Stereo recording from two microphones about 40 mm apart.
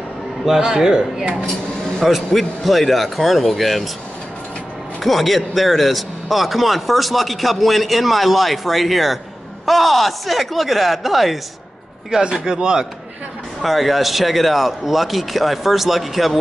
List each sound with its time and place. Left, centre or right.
0.5 s speech: centre
2.0 s speech: centre
5.0 s speech: centre
12.1 s speech: centre
13.6 s speech: centre